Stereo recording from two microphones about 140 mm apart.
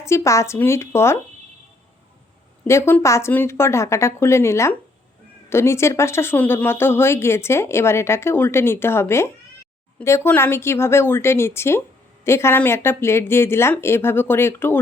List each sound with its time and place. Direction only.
0.0 s speech: 20° left (ahead or behind)
2.6 s speech: 20° left (ahead or behind)